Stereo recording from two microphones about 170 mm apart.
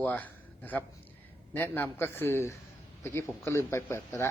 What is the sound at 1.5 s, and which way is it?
A man's voice, 10° left (ahead or behind).